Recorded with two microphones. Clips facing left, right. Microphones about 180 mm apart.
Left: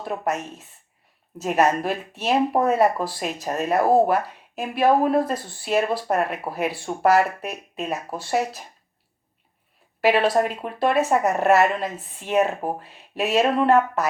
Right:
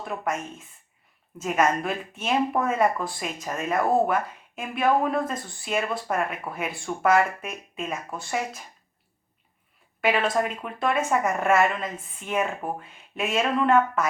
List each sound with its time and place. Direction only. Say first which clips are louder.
0.0 s speech: left 3 dB; 35° left (ahead or behind)
10.1 s speech: left 5 dB; 35° left (ahead or behind)